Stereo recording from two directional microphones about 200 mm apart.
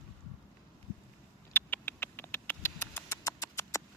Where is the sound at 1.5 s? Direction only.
10° left (ahead or behind).